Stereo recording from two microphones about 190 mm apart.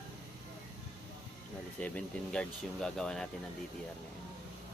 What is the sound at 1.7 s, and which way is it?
Speech, 5° left (ahead or behind).